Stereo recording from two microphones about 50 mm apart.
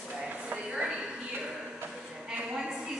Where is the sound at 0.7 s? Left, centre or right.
Centre.